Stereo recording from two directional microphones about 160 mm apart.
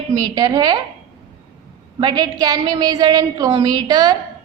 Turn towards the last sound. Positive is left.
turn(degrees=-25)  # may be behind; listen again after turning